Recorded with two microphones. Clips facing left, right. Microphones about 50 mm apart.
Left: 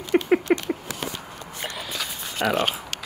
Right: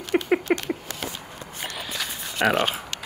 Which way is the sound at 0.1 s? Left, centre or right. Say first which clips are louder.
Left 2 dB; centre.